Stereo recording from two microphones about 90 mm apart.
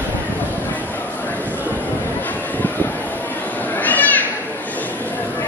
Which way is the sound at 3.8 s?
20° left (ahead or behind).